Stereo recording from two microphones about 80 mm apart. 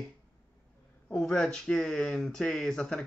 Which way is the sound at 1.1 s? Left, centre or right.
Centre.